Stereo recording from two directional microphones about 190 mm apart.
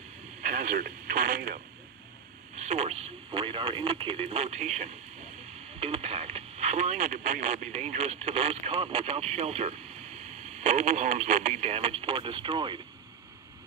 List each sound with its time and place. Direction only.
0.4 s speech: 45° right (ahead or behind)
2.5 s speech: 35° right (ahead or behind)